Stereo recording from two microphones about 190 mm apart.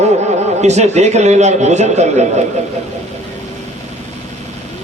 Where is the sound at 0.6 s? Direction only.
35° right (ahead or behind).